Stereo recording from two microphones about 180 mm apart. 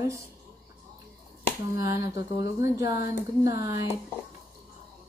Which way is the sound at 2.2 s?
60° left (ahead or behind).